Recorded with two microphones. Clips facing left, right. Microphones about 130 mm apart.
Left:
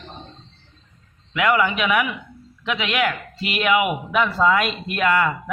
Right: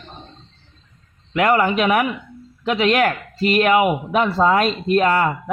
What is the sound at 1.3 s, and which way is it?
Speech, 40° right (ahead or behind).